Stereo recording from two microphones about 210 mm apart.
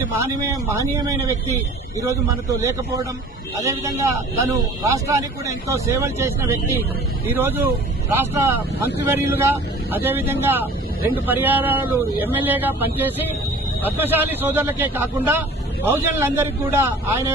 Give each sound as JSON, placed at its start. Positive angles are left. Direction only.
{"t": 0.4, "sound": "speech", "side_deg": -15}